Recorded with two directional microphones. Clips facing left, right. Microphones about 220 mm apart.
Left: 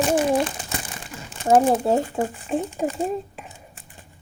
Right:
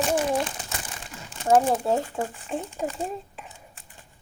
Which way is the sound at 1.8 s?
25° left (ahead or behind).